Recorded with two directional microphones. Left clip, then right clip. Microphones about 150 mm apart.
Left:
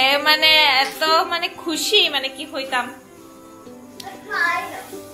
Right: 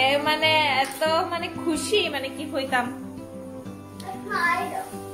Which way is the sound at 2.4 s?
30° right (ahead or behind).